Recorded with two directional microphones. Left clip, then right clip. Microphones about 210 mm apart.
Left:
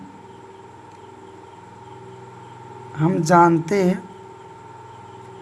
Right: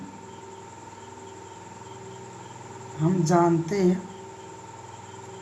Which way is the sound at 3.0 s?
55° left (ahead or behind).